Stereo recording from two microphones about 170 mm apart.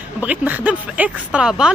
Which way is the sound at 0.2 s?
10° right (ahead or behind).